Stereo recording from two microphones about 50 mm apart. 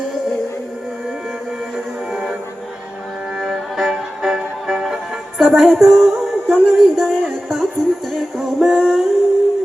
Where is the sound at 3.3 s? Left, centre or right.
Centre.